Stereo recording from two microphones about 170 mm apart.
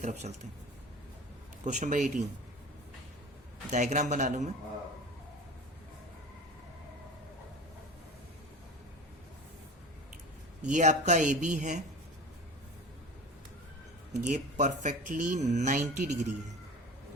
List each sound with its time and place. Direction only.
0.0 s speech: 45° right (ahead or behind)
1.6 s speech: 45° right (ahead or behind)
3.7 s speech: 45° right (ahead or behind)
10.7 s speech: 45° right (ahead or behind)
14.3 s speech: 45° right (ahead or behind)